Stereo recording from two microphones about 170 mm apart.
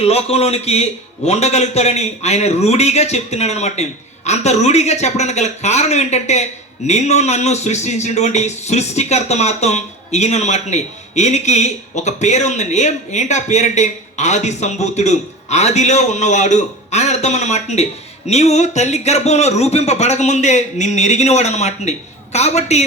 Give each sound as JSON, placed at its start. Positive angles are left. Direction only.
{"t": 0.0, "sound": "a man's voice", "side_deg": 35}